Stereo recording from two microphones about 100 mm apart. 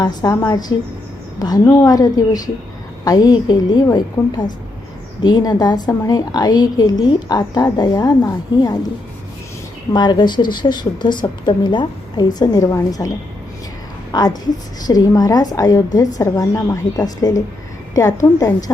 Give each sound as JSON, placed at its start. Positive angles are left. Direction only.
{"t": 0.0, "sound": "a woman's voice", "side_deg": 40}
{"t": 9.9, "sound": "a woman's voice", "side_deg": 45}
{"t": 14.1, "sound": "a woman's voice", "side_deg": 45}